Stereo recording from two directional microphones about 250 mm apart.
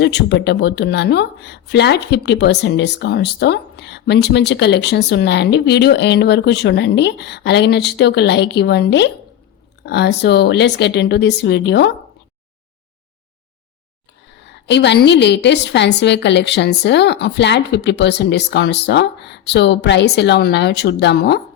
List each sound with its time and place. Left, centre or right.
0.0 s a woman's voice: left
14.4 s speech: left